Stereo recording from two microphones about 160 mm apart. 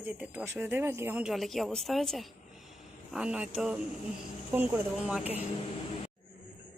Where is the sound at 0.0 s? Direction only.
10° right (ahead or behind).